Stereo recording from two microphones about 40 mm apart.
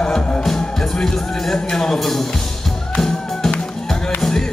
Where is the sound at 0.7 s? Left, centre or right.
Centre.